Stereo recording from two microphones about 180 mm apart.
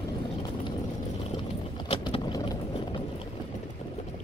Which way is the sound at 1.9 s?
30° left (ahead or behind).